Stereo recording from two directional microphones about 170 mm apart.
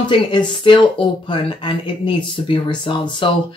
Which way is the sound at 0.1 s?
30° left (ahead or behind).